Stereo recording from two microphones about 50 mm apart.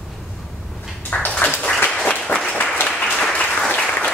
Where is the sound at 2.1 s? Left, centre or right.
Left.